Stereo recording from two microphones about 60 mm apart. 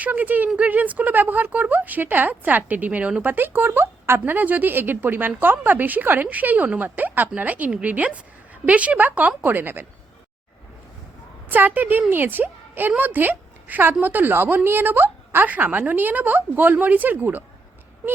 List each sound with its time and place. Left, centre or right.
0.0 s speech: right
4.4 s speech: right
11.4 s speech: right